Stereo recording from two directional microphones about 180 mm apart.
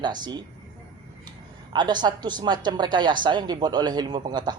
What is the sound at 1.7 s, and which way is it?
A woman's voice, 25° right (ahead or behind).